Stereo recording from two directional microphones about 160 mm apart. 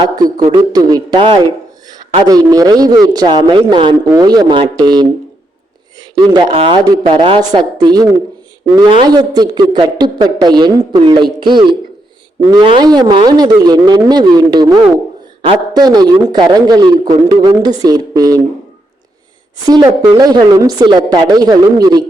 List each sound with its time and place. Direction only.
0.5 s speech: 25° right (ahead or behind)
6.0 s a sound: 25° right (ahead or behind)
6.5 s speech: 35° right (ahead or behind)
19.6 s speech: 25° right (ahead or behind)